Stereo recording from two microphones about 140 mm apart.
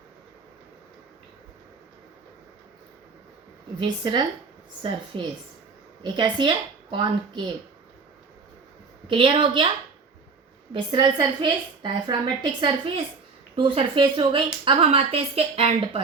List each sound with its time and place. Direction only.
3.8 s a woman's voice: 35° right (ahead or behind)
9.0 s a woman's voice: 40° right (ahead or behind)
10.8 s a woman's voice: 35° right (ahead or behind)